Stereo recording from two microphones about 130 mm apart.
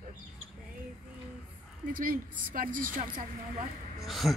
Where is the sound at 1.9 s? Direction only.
90° right.